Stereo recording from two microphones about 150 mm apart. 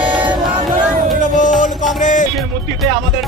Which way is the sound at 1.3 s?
60° left (ahead or behind).